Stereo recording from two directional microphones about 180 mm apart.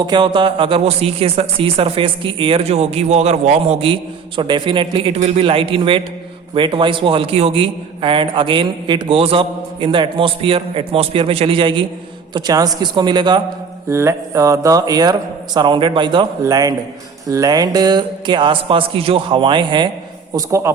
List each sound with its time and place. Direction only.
0.0 s a man's voice: 25° right (ahead or behind)